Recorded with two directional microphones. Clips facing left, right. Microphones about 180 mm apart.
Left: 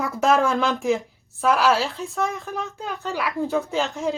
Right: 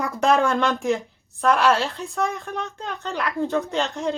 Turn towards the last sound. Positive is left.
turn(degrees=0)  # may be behind; listen again after turning